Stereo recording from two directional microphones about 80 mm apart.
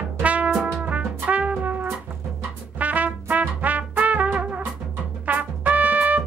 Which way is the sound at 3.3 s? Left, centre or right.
Centre.